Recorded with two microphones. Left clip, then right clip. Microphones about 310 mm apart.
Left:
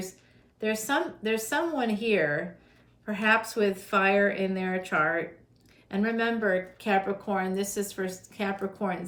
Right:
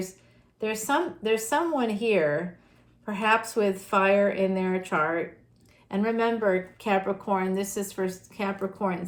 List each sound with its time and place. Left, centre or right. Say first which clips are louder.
0.6 s a woman's voice: right 1 dB; centre